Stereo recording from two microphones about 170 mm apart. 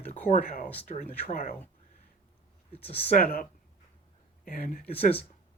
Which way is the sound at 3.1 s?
55° left (ahead or behind).